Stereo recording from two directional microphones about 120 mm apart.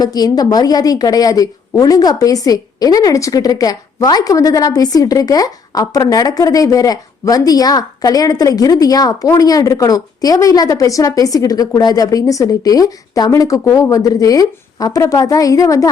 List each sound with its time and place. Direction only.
0.0 s a woman's voice: 35° left (ahead or behind)